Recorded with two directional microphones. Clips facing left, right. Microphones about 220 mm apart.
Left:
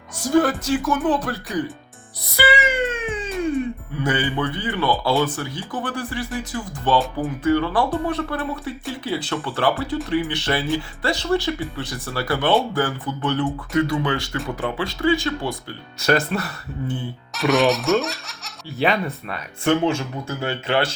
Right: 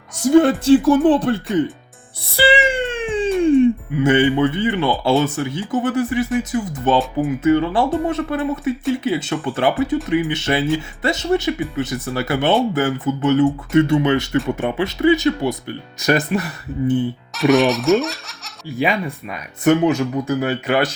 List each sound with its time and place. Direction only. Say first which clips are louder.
0.3 s speech: right 7 dB; 25° right (ahead or behind)
2.2 s music: right 4 dB; 30° right (ahead or behind)
3.4 s speech: right 10 dB; 30° right (ahead or behind)
17.3 s speech: right 3 dB; centre (ahead or behind)
18.8 s speech: right 1 dB; 10° right (ahead or behind)